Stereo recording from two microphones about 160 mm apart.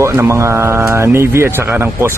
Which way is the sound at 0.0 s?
15° right (ahead or behind).